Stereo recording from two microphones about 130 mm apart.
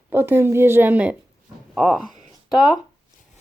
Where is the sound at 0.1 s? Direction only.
15° right (ahead or behind).